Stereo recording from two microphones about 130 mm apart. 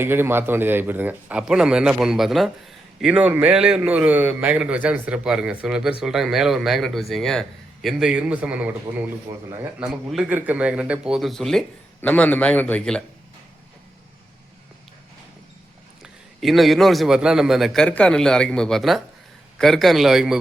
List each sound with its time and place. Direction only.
0.0 s a man's voice: 15° right (ahead or behind)
9.3 s speech: 20° right (ahead or behind)
9.8 s a man's voice: centre (ahead or behind)
12.0 s a man's voice: 10° left (ahead or behind)
16.4 s a man's voice: centre (ahead or behind)